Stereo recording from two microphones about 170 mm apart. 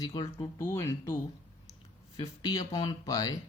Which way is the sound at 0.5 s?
15° left (ahead or behind).